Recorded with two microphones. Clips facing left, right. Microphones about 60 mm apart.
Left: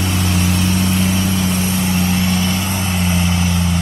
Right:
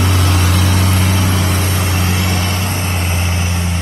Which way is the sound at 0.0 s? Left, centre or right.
Right.